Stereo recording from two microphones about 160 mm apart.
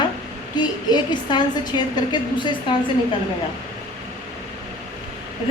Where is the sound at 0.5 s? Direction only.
25° left (ahead or behind).